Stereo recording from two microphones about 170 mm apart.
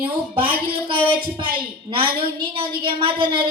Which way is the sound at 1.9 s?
30° right (ahead or behind).